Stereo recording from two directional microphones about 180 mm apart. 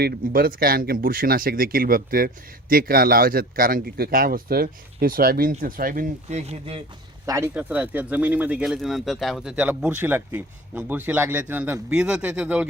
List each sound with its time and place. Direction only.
0.0 s speech: 55° right (ahead or behind); by 6.8 s 35° right (ahead or behind)
7.3 s speech: 15° right (ahead or behind)